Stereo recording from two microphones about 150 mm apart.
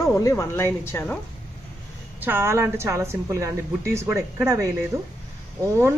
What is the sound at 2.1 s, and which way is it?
A woman's voice, 15° right (ahead or behind).